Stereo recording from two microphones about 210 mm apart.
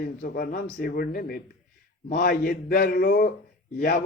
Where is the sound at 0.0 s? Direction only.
45° left (ahead or behind).